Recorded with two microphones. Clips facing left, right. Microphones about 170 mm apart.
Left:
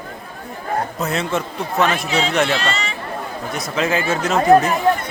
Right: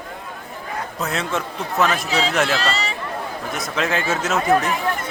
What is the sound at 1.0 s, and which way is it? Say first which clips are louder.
A man's voice: left 3 dB; centre (ahead or behind).